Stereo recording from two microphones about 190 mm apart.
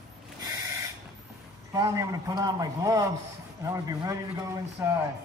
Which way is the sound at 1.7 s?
15° right (ahead or behind).